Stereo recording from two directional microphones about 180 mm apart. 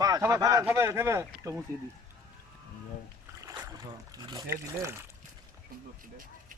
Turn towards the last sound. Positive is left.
turn(degrees=-15)  # may be behind; listen again after turning